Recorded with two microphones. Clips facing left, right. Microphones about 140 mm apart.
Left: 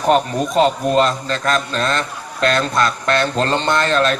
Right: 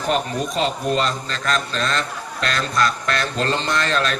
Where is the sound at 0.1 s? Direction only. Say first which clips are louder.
Left 6 dB; 40° left (ahead or behind).